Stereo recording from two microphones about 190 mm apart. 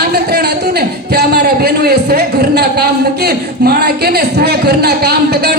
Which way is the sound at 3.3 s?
55° right (ahead or behind).